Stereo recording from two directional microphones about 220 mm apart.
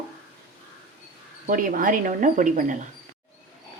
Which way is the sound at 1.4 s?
40° right (ahead or behind).